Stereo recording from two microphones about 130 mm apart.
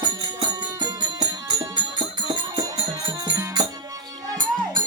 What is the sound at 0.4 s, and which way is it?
Music, 30° right (ahead or behind).